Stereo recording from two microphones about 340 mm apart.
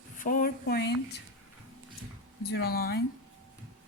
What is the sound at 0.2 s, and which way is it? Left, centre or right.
Speech, left.